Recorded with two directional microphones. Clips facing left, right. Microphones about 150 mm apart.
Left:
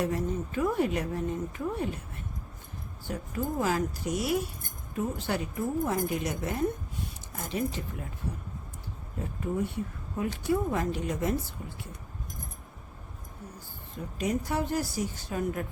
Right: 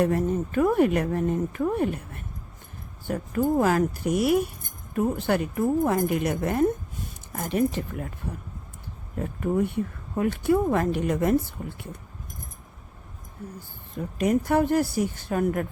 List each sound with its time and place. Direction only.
0.0 s speech: 55° right (ahead or behind)
9.1 s speech: 60° right (ahead or behind)
14.2 s speech: 60° right (ahead or behind)